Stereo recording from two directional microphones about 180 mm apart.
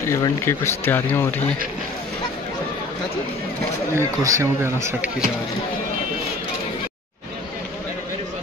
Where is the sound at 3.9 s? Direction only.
15° right (ahead or behind).